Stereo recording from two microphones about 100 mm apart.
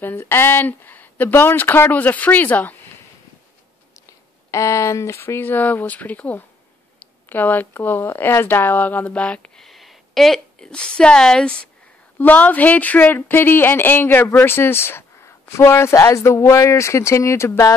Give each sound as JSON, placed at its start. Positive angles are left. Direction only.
{"t": 0.0, "sound": "speech", "side_deg": 25}
{"t": 4.5, "sound": "speech", "side_deg": 30}